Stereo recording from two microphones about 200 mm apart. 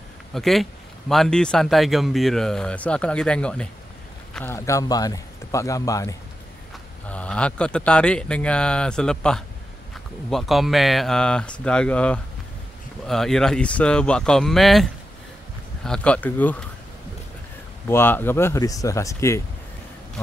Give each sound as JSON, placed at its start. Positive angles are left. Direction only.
{"t": 0.3, "sound": "a man's voice", "side_deg": 0}
{"t": 7.1, "sound": "speech", "side_deg": 5}
{"t": 17.8, "sound": "a man's voice", "side_deg": 10}